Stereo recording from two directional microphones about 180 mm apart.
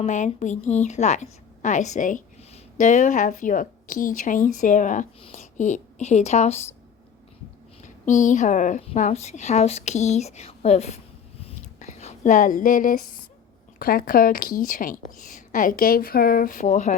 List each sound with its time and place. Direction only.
0.0 s a woman's voice: 40° left (ahead or behind)
8.0 s a woman's voice: 45° left (ahead or behind)
11.4 s a sound: 40° left (ahead or behind)
13.7 s a woman's voice: 55° left (ahead or behind)